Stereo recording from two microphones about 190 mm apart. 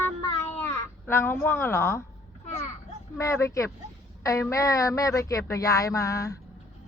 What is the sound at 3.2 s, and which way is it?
Speech, 15° left (ahead or behind).